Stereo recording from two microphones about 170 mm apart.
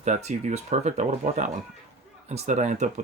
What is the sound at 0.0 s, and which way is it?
Speech, 40° right (ahead or behind).